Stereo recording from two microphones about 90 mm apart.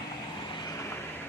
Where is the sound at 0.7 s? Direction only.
35° left (ahead or behind).